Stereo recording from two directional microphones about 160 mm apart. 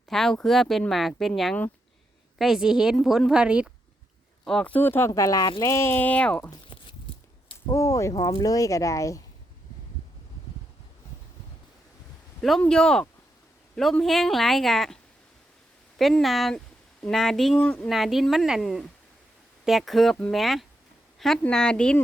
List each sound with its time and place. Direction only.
0.1 s speech: 5° left (ahead or behind)
4.4 s speech: 5° left (ahead or behind)
6.5 s a sound: 30° left (ahead or behind)
7.7 s speech: 20° left (ahead or behind)
12.4 s speech: centre (ahead or behind)
16.0 s speech: centre (ahead or behind)